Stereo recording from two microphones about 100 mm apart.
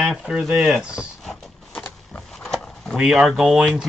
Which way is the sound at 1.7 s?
20° left (ahead or behind).